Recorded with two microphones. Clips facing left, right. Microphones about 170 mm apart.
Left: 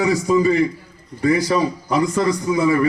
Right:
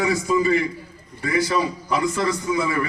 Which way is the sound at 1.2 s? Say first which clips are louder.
Left 5 dB; 35° left (ahead or behind).